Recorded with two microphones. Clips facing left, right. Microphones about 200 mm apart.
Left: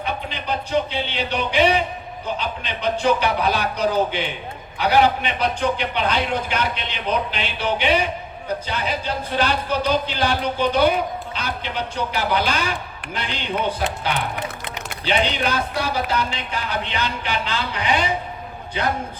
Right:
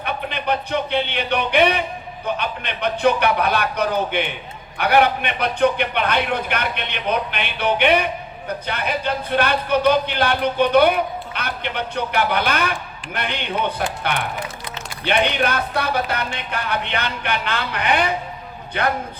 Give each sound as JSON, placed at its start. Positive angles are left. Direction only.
{"t": 0.0, "sound": "music", "side_deg": -60}
{"t": 2.2, "sound": "speech", "side_deg": -60}
{"t": 15.0, "sound": "speech", "side_deg": -60}